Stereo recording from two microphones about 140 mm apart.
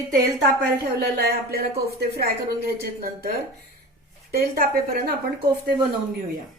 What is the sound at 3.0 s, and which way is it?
A woman's voice, 90° right.